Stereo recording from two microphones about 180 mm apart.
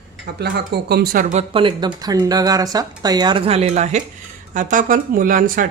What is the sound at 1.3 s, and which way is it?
Speech, 35° right (ahead or behind).